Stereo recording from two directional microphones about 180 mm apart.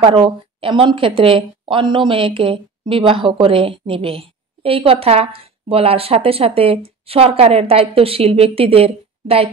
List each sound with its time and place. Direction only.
0.0 s a woman's voice: 30° right (ahead or behind)